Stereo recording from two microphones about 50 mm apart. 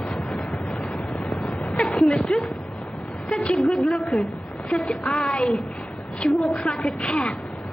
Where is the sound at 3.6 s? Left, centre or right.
Centre.